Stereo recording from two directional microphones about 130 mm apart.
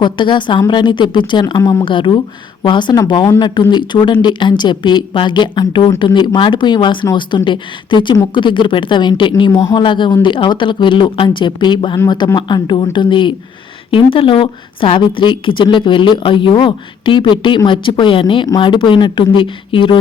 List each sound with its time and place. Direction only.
0.0 s a woman's voice: 35° left (ahead or behind)